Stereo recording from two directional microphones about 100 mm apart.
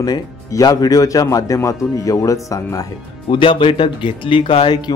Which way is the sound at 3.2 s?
55° left (ahead or behind).